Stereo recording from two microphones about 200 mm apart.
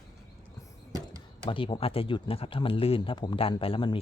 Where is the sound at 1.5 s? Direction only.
25° left (ahead or behind).